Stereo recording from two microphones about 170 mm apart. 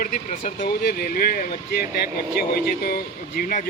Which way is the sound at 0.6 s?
65° left (ahead or behind).